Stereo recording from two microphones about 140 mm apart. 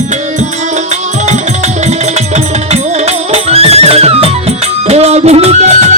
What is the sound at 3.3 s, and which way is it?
Music, 50° right (ahead or behind).